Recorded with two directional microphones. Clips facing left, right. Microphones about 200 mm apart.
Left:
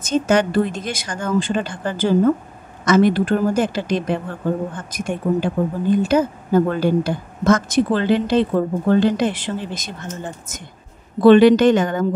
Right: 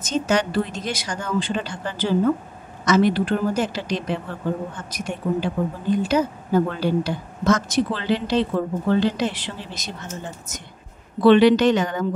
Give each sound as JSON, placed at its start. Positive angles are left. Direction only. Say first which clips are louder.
{"t": 0.0, "sound": "a woman's voice", "louder": "left 4 dB", "side_deg": 50}
{"t": 11.1, "sound": "a woman's voice", "louder": "left 4 dB", "side_deg": 45}